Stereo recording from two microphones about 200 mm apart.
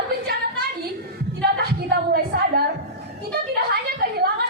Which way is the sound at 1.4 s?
50° right (ahead or behind).